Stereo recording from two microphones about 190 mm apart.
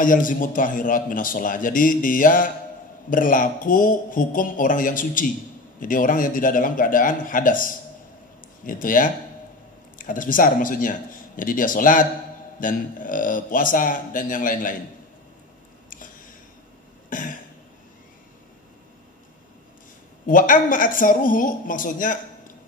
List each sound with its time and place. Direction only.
0.0 s a man's voice: 45° left (ahead or behind)
17.1 s throat clearing: 45° left (ahead or behind)
20.2 s a man's voice: 45° left (ahead or behind)